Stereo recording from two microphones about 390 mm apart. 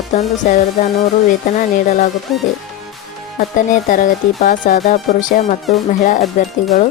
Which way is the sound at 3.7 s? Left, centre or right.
Centre.